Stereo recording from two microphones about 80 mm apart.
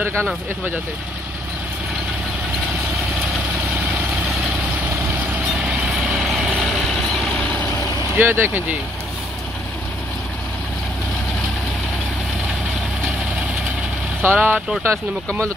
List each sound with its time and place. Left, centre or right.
5.5 s vehicle: centre
8.2 s speech: right
14.2 s speech: right
14.8 s speech: right